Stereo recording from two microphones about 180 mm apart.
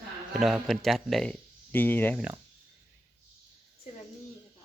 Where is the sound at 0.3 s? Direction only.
Centre (ahead or behind).